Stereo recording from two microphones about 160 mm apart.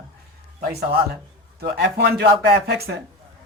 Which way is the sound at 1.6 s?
85° right.